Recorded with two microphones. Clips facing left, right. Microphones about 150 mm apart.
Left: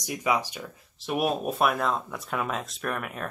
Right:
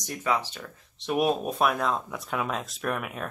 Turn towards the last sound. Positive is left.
turn(degrees=0)  # may be behind; listen again after turning